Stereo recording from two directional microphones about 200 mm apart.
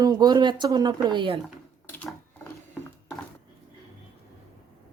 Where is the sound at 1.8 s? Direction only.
10° left (ahead or behind).